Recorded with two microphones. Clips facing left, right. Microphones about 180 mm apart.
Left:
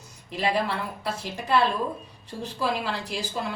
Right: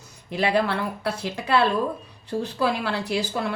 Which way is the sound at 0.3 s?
75° right (ahead or behind).